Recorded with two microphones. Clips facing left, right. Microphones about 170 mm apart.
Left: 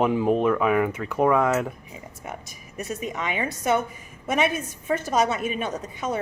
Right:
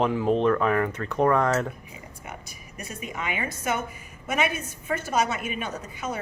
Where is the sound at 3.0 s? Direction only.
35° left (ahead or behind).